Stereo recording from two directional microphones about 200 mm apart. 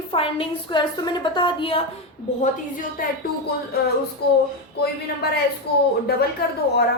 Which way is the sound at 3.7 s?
50° left (ahead or behind).